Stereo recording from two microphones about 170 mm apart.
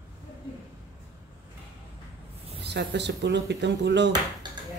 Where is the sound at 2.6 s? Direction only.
80° right.